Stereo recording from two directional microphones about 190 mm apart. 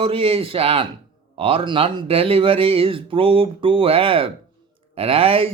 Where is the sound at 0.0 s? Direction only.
30° right (ahead or behind).